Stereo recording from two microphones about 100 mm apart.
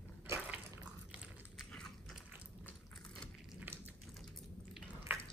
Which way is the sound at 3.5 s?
20° right (ahead or behind).